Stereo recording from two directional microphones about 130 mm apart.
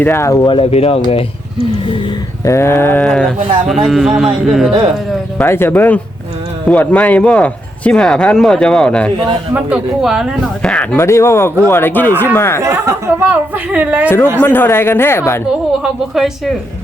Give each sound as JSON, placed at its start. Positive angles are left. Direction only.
{"t": 0.0, "sound": "speech", "side_deg": 20}
{"t": 0.4, "sound": "speech", "side_deg": 45}
{"t": 2.4, "sound": "a sound", "side_deg": 20}
{"t": 5.4, "sound": "speech", "side_deg": 15}
{"t": 9.5, "sound": "a sound", "side_deg": -10}
{"t": 10.6, "sound": "speech", "side_deg": 5}
{"t": 10.9, "sound": "speech", "side_deg": 20}
{"t": 12.6, "sound": "speech", "side_deg": -25}
{"t": 14.4, "sound": "speech", "side_deg": 15}
{"t": 15.8, "sound": "a sound", "side_deg": -5}